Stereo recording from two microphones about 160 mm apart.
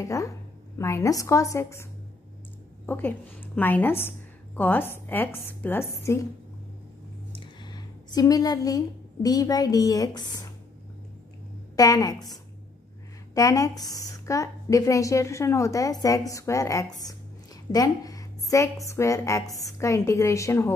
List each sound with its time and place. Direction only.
0.0 s a woman's voice: 20° left (ahead or behind)
2.9 s a woman's voice: 10° left (ahead or behind)
7.3 s a woman's voice: 25° left (ahead or behind)
11.7 s a woman's voice: 20° left (ahead or behind)